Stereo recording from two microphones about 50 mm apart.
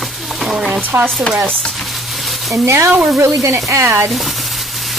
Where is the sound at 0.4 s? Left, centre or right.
Centre.